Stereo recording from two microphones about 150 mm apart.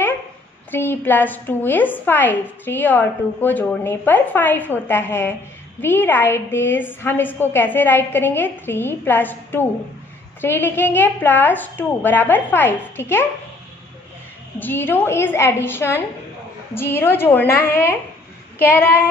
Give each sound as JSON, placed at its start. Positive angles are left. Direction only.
{"t": 0.7, "sound": "a woman's voice", "side_deg": 15}
{"t": 14.6, "sound": "a woman's voice", "side_deg": 15}